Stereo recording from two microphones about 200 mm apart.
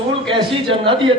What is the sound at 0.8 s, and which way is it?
Speech, 25° right (ahead or behind).